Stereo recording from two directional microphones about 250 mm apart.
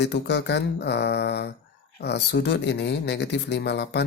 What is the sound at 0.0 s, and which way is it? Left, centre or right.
Speech, left.